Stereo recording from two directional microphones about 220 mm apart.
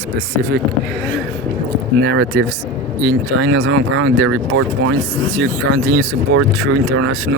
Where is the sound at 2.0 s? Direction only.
55° right (ahead or behind).